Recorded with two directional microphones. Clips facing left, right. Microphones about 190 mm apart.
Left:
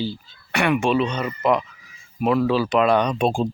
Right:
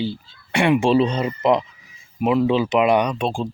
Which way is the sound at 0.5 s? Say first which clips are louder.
Right 3 dB; 25° right (ahead or behind).